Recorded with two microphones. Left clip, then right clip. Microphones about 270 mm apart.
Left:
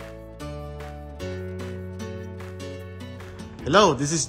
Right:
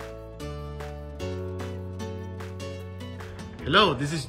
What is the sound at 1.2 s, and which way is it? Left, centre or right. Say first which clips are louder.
Music: even; centre.